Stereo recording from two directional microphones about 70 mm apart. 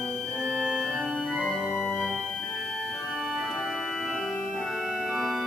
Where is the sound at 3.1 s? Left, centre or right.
Centre.